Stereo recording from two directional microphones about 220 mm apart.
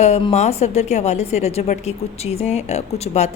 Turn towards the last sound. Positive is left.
turn(degrees=30)  # may be behind; listen again after turning